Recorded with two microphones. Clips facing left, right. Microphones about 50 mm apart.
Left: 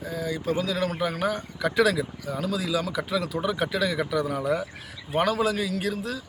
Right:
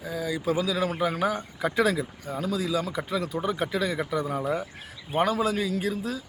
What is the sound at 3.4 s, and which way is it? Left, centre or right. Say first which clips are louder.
Speech: left 1 dB; left.